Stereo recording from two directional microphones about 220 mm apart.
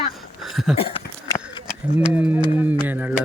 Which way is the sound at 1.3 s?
20° left (ahead or behind).